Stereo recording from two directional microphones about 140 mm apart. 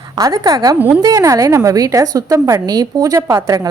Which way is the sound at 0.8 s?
10° right (ahead or behind).